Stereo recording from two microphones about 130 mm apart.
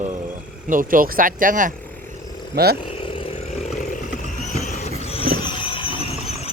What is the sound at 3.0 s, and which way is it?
Vehicle, 45° left (ahead or behind).